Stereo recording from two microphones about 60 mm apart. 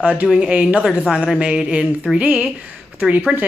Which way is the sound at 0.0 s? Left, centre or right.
Right.